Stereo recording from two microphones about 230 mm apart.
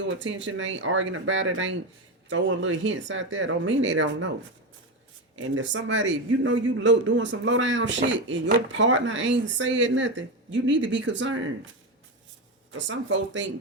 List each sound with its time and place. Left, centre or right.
0.0 s a man's voice: right
5.4 s a man's voice: right
12.7 s a man's voice: right